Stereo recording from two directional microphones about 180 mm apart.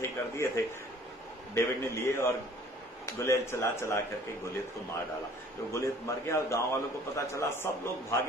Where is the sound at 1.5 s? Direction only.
15° left (ahead or behind).